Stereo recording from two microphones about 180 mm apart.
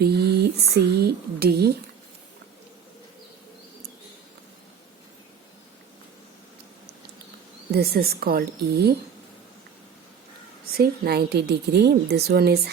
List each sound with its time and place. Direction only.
0.0 s speech: 65° right (ahead or behind)
7.7 s a woman's voice: 60° right (ahead or behind)
10.8 s a woman's voice: 60° right (ahead or behind)